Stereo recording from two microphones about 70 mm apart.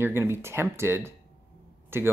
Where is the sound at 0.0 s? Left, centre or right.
Right.